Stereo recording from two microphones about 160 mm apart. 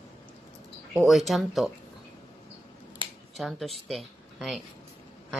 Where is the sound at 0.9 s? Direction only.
Centre (ahead or behind).